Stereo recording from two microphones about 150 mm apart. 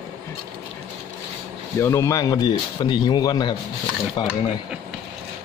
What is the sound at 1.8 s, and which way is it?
Speech, 20° left (ahead or behind).